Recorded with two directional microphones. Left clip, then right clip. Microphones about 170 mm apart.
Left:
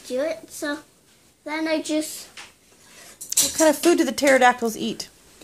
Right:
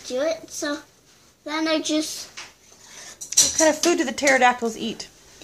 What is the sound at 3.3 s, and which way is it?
Speech, 35° left (ahead or behind).